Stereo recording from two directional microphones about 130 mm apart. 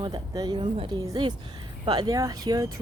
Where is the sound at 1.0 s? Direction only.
30° right (ahead or behind).